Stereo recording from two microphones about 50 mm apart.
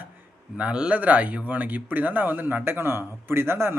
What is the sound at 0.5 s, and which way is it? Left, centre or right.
Speech, right.